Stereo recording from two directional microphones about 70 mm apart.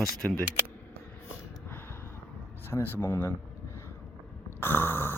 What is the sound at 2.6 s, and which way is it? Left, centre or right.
Speech, left.